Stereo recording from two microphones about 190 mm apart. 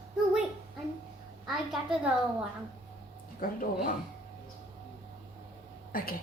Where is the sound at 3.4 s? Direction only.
50° left (ahead or behind).